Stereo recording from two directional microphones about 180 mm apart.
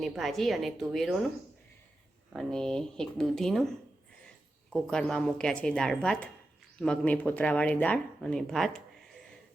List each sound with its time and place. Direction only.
0.0 s a woman's voice: centre (ahead or behind)
2.3 s a woman's voice: centre (ahead or behind)
4.7 s a woman's voice: 5° left (ahead or behind)